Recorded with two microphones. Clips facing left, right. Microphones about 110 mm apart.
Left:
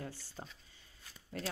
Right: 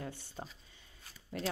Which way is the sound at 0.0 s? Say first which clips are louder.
Right 2 dB; 20° right (ahead or behind).